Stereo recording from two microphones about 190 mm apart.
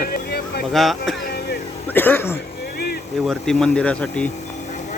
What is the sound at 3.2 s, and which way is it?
Speech, centre (ahead or behind).